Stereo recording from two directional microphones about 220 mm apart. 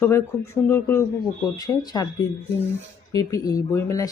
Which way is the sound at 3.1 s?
15° left (ahead or behind).